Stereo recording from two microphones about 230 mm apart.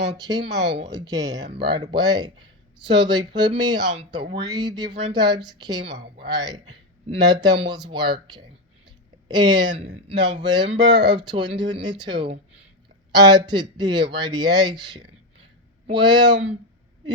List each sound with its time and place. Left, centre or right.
0.2 s speech: centre
9.3 s speech: centre